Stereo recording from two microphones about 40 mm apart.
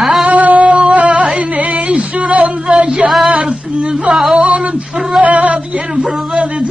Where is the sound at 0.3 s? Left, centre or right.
Right.